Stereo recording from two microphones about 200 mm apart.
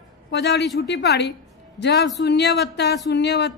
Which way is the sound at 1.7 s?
55° left (ahead or behind).